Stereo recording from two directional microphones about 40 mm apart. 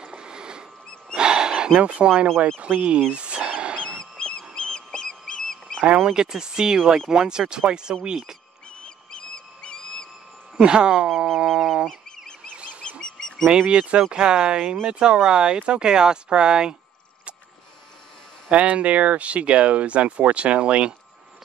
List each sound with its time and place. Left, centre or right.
0.0 s rodents: right
1.1 s wild animals: right
1.8 s speech: right
2.7 s a sound: right
3.8 s fowl: centre
5.9 s speech: centre
8.8 s a sound: left
10.6 s speech: right
11.3 s fowl: centre
13.0 s bird: centre
13.5 s speech: right
18.5 s speech: right